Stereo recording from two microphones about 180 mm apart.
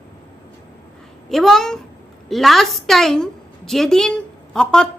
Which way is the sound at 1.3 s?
Centre (ahead or behind).